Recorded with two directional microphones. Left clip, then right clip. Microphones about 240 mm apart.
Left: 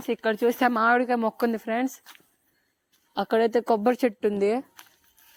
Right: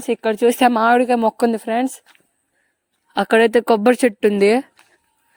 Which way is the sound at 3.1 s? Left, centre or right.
Right.